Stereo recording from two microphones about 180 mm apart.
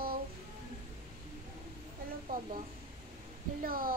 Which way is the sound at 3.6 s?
55° right (ahead or behind).